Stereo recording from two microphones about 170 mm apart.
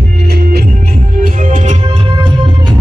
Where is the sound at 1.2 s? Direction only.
50° right (ahead or behind).